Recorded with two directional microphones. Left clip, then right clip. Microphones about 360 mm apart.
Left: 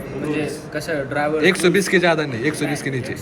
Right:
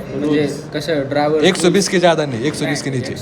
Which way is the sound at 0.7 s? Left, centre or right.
Right.